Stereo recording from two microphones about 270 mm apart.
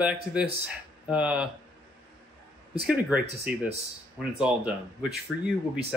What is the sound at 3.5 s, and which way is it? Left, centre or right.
Speech, right.